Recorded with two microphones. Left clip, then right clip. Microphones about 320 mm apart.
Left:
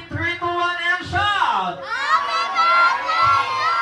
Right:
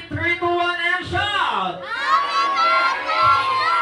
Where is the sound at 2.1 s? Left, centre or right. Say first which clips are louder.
Right 2 dB; left.